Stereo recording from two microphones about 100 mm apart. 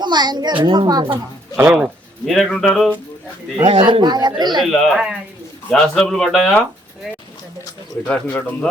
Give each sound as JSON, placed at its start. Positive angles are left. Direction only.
{"t": 0.0, "sound": "a child's voice", "side_deg": -45}
{"t": 1.5, "sound": "speech", "side_deg": -15}
{"t": 2.2, "sound": "speech", "side_deg": 0}
{"t": 3.5, "sound": "speech", "side_deg": -70}
{"t": 4.0, "sound": "a child's voice", "side_deg": -45}
{"t": 4.6, "sound": "speech", "side_deg": 0}
{"t": 8.0, "sound": "speech", "side_deg": 15}